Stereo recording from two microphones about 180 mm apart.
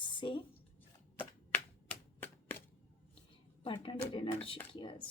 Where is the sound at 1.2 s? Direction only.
10° left (ahead or behind).